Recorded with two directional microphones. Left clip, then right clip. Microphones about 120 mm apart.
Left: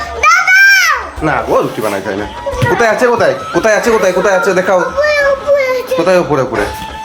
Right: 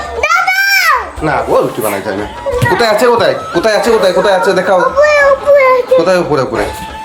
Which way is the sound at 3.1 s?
Centre (ahead or behind).